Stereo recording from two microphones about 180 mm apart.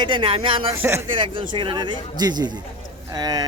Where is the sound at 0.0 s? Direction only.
30° right (ahead or behind).